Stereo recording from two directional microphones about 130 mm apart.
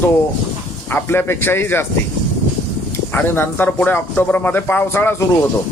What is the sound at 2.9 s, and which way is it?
Speech, 15° left (ahead or behind).